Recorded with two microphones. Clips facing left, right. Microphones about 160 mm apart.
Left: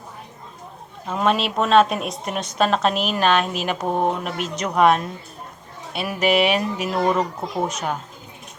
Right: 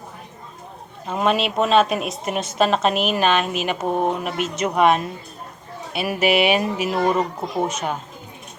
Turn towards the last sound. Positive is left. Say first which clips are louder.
# right 1 dB
turn(degrees=0)  # may be behind; listen again after turning